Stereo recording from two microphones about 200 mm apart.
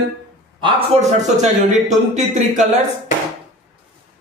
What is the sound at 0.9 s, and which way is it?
Speech, 30° right (ahead or behind).